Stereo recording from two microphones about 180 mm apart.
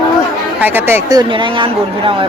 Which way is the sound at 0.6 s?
10° right (ahead or behind).